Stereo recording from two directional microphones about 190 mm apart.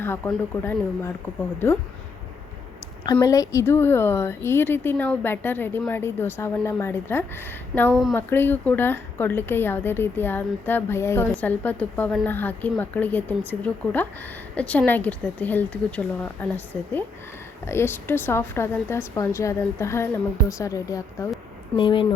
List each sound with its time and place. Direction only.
0.0 s a woman's voice: 10° left (ahead or behind)
3.1 s a woman's voice: 20° left (ahead or behind)